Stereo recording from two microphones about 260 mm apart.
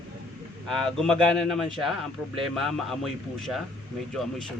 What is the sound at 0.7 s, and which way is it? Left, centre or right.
Speech, centre.